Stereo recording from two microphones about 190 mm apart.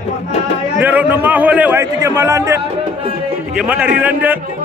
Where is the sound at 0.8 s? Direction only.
10° right (ahead or behind).